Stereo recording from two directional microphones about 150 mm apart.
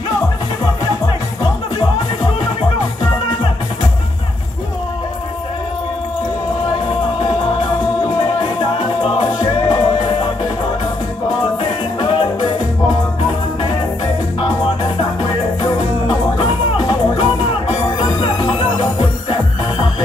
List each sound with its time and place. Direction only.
1.0 s music: 25° left (ahead or behind)
8.2 s music: 35° left (ahead or behind)
12.0 s music: 30° left (ahead or behind)
15.6 s music: 30° left (ahead or behind)